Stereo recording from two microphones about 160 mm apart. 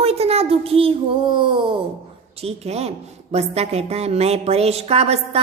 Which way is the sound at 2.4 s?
40° right (ahead or behind).